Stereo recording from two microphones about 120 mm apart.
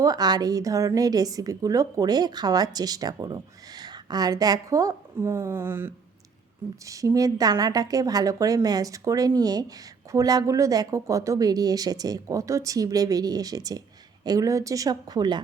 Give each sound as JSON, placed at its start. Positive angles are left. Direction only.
{"t": 0.0, "sound": "a woman's voice", "side_deg": -35}